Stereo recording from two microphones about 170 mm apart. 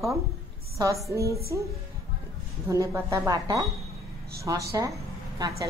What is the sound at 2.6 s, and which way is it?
A woman's voice, 15° right (ahead or behind).